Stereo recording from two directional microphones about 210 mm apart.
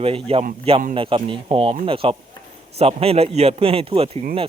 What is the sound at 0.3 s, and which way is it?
A man's voice, 25° right (ahead or behind).